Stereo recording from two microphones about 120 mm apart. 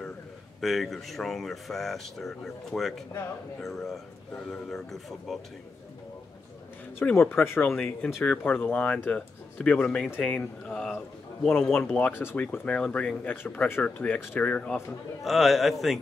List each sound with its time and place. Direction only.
0.6 s speech: centre (ahead or behind)
7.0 s speech: 15° left (ahead or behind)
12.1 s speech: 20° left (ahead or behind)
15.2 s speech: centre (ahead or behind)